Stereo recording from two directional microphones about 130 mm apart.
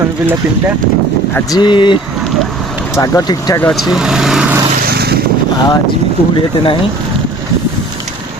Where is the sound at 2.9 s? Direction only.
25° left (ahead or behind).